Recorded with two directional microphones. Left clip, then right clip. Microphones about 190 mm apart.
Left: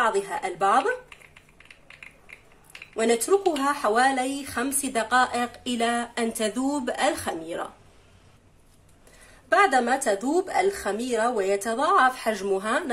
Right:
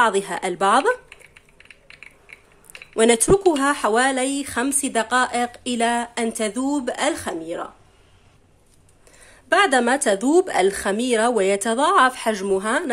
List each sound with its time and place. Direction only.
0.0 s speech: 45° right (ahead or behind)
3.0 s speech: 40° right (ahead or behind); by 7.7 s 20° right (ahead or behind)
9.2 s speech: 40° right (ahead or behind)